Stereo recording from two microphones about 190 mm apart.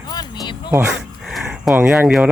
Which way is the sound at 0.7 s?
5° right (ahead or behind).